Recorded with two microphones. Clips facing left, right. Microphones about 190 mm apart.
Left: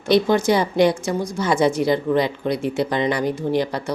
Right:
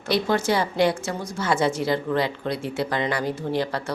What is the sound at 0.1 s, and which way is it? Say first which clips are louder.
A woman's voice: left 6 dB; 15° left (ahead or behind).